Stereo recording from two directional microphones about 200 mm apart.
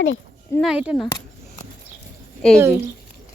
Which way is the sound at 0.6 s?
5° right (ahead or behind).